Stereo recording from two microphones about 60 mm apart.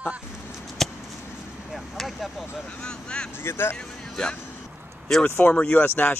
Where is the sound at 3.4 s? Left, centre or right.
Left.